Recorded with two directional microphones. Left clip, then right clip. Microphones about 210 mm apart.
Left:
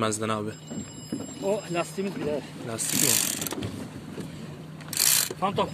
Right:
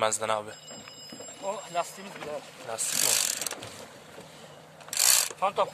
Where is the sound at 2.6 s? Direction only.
Centre (ahead or behind).